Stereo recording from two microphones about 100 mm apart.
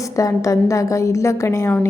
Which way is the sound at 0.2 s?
35° left (ahead or behind).